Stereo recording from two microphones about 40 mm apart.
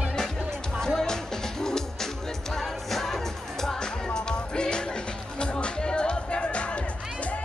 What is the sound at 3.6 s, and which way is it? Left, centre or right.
Music, centre.